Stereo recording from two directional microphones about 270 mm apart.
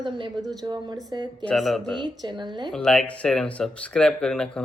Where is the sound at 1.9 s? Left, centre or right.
Centre.